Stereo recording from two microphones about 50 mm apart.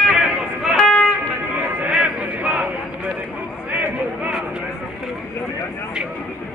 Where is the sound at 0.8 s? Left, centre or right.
Centre.